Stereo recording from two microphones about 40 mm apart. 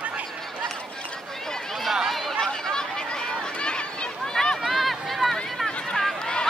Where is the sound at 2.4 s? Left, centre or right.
Centre.